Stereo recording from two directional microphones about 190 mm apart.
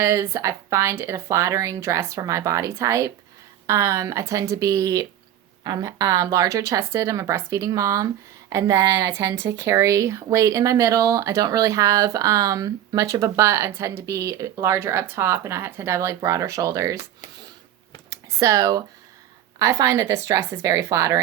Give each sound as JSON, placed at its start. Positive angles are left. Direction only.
{"t": 0.0, "sound": "speech", "side_deg": -15}
{"t": 18.1, "sound": "computer keyboard", "side_deg": -15}
{"t": 19.5, "sound": "speech", "side_deg": -20}